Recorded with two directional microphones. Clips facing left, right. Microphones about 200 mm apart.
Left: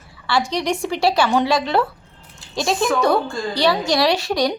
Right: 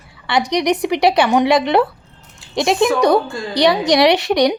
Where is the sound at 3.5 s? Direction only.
20° right (ahead or behind).